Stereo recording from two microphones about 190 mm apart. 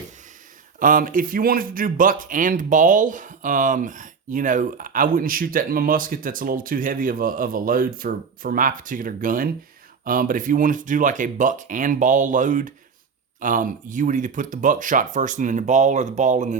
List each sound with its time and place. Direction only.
0.8 s speech: 45° right (ahead or behind)